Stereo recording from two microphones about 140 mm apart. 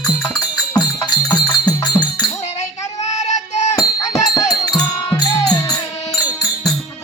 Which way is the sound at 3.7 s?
25° left (ahead or behind).